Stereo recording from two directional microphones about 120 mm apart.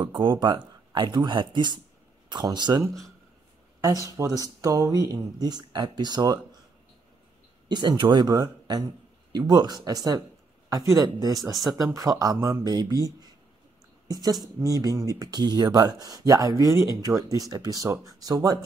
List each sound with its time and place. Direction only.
0.0 s speech: 45° right (ahead or behind)
3.8 s speech: 30° right (ahead or behind)
7.6 s speech: 35° right (ahead or behind)